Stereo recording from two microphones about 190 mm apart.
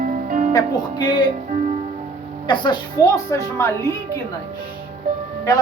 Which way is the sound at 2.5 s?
20° left (ahead or behind).